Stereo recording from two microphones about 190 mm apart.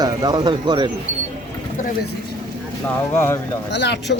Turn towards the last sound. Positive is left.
turn(degrees=65)  # may be behind; listen again after turning